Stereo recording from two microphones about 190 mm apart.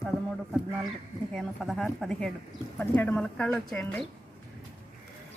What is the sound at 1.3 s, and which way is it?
Speech, centre (ahead or behind).